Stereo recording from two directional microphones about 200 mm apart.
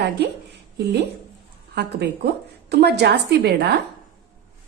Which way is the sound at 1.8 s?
55° right (ahead or behind).